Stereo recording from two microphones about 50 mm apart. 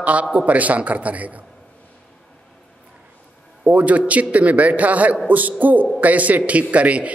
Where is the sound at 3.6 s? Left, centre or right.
Right.